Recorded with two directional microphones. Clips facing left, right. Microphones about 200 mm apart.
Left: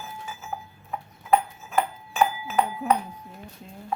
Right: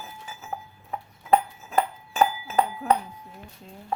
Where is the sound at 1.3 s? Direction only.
35° right (ahead or behind).